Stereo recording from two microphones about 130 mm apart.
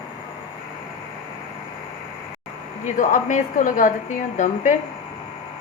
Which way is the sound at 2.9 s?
80° left.